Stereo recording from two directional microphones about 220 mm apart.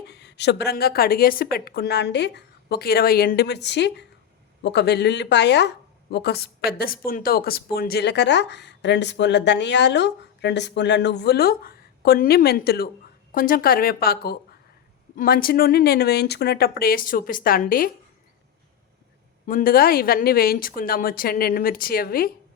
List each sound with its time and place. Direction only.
0.1 s speech: 50° left (ahead or behind)
19.5 s speech: 40° left (ahead or behind)